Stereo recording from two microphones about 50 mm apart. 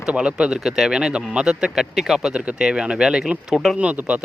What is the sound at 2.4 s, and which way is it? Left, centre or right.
Speech, right.